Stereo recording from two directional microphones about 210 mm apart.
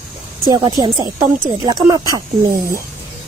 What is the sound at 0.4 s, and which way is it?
Speech, 20° right (ahead or behind).